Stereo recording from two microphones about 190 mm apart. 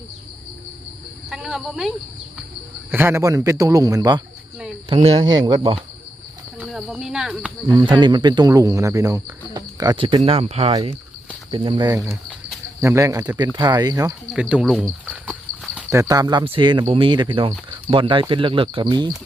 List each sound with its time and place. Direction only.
1.3 s speech: centre (ahead or behind)
2.9 s speech: 10° right (ahead or behind)
6.6 s speech: centre (ahead or behind)
7.7 s speech: 25° right (ahead or behind)
14.3 s speech: 5° right (ahead or behind)
15.5 s a sound: 45° right (ahead or behind)
15.9 s speech: 15° right (ahead or behind)